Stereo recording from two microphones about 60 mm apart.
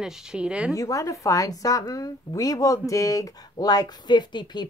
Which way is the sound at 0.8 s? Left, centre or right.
Left.